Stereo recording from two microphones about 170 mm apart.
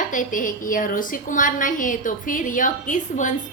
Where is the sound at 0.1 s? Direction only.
50° left (ahead or behind).